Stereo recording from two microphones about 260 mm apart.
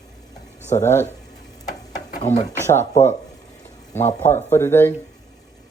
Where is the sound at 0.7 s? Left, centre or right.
Centre.